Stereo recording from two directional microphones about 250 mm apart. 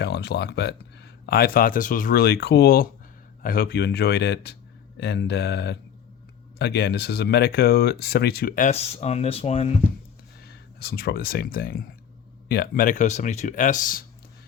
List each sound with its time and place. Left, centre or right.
0.0 s speech: left
10.4 s speech: left